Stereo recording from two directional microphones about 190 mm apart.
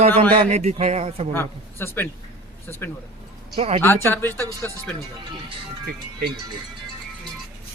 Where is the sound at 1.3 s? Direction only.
10° left (ahead or behind).